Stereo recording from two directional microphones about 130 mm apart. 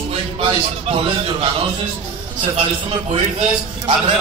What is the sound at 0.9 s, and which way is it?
Speech, 45° right (ahead or behind).